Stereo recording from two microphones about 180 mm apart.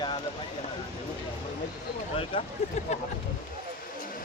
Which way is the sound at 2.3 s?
30° left (ahead or behind).